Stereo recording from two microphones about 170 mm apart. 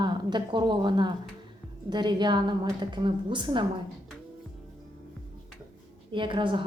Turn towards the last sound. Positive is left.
turn(degrees=-30)  # may be behind; listen again after turning